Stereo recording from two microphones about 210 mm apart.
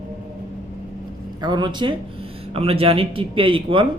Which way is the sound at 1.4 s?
20° right (ahead or behind).